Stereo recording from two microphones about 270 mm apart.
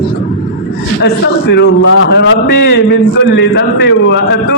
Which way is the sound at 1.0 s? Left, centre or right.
Left.